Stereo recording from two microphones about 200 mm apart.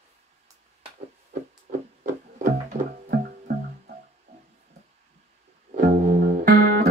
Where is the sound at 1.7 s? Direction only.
40° right (ahead or behind).